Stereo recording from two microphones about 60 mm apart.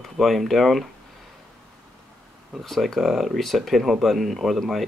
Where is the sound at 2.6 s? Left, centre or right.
Centre.